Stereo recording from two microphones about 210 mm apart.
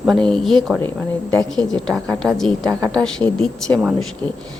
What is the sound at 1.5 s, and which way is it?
Speech, 65° left (ahead or behind).